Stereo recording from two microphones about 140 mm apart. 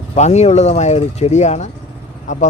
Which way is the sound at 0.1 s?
55° left (ahead or behind).